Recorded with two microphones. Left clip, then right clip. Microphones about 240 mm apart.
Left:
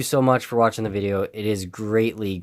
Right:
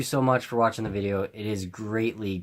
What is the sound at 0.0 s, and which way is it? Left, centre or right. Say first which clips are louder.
Speech: left 5 dB; left.